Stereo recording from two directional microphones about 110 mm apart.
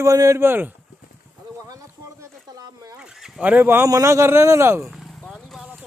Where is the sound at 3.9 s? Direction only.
25° right (ahead or behind).